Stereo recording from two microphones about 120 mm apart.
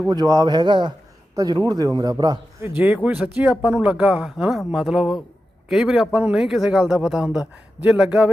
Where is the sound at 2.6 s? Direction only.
20° right (ahead or behind).